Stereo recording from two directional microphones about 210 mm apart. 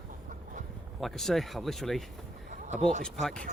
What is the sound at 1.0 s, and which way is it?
Speech, centre (ahead or behind).